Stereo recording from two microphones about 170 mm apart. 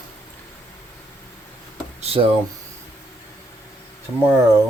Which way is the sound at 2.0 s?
35° right (ahead or behind).